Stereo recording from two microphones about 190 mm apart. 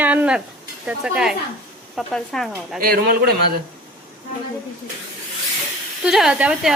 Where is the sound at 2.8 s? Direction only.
50° right (ahead or behind).